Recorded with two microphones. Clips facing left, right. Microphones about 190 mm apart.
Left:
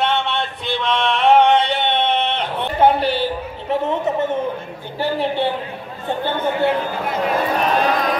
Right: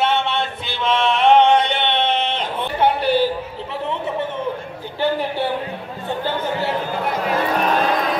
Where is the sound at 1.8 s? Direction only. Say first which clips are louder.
Left 1 dB; 50° left (ahead or behind).